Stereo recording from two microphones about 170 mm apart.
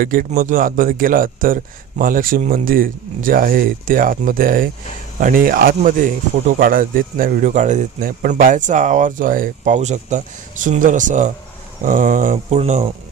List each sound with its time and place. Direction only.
0.0 s speech: 55° right (ahead or behind); by 12.9 s 40° right (ahead or behind)